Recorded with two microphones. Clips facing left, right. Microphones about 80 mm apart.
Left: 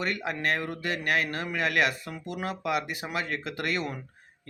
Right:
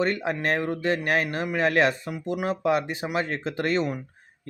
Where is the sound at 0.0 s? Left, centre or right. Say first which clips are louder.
Right 5 dB; right.